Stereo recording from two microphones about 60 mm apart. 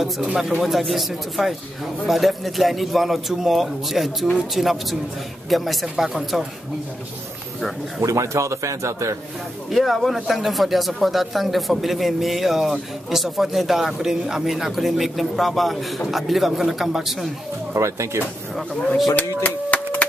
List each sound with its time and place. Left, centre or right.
0.4 s speech: centre
8.0 s a man's voice: right
9.7 s speech: centre
17.7 s a man's voice: right
19.1 s a sound: left